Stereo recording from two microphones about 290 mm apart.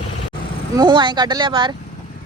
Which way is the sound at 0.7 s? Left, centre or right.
Centre.